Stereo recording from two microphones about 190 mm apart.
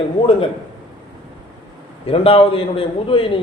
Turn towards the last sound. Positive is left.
turn(degrees=30)  # may be behind; listen again after turning